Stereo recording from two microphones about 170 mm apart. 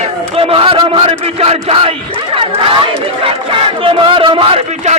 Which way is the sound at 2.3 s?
35° right (ahead or behind).